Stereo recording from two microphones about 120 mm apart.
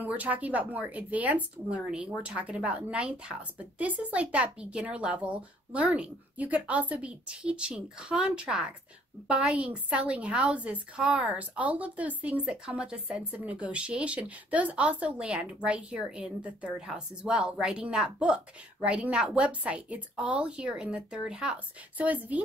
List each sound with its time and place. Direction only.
0.0 s a woman's voice: 10° right (ahead or behind)